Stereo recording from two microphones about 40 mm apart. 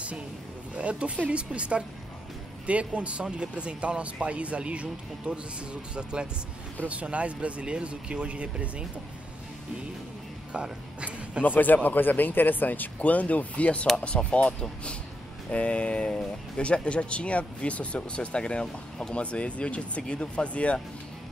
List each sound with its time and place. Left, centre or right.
0.7 s speech: right
6.9 s speech: right
10.5 s a sound: right
11.4 s speech: left